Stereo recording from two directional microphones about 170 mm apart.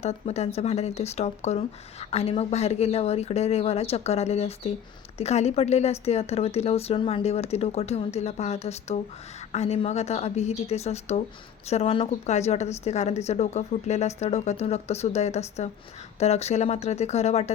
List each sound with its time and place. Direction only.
0.0 s speech: 40° left (ahead or behind)